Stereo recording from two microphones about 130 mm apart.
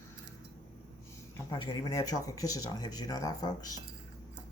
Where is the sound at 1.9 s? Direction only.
25° left (ahead or behind).